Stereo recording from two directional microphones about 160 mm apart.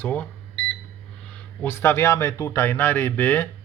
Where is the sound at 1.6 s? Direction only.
15° left (ahead or behind).